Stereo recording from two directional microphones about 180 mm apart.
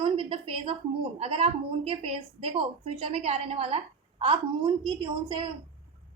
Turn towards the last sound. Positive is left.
turn(degrees=-25)  # may be behind; listen again after turning